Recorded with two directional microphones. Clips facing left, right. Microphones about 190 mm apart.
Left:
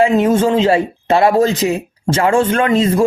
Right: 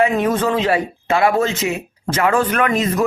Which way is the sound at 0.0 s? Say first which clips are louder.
Left 4 dB; 25° left (ahead or behind).